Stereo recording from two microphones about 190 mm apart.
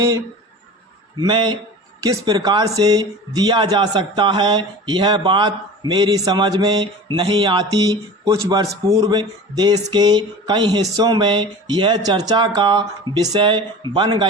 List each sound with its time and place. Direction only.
1.2 s speech: 25° right (ahead or behind)